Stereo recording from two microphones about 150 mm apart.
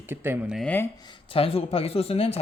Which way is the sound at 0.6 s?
10° left (ahead or behind).